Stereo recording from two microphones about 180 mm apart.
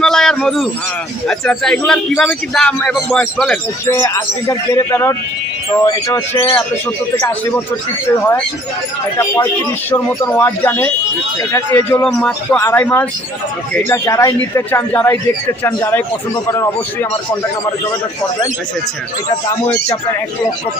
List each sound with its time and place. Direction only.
0.0 s a sound: 5° left (ahead or behind)
1.3 s a man's voice: 5° left (ahead or behind)
3.8 s a man's voice: 15° left (ahead or behind)
9.1 s a man's voice: 15° left (ahead or behind)
19.6 s a man's voice: 10° left (ahead or behind)